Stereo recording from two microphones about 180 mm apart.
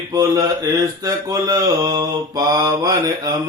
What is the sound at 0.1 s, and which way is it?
Mantra, 20° right (ahead or behind).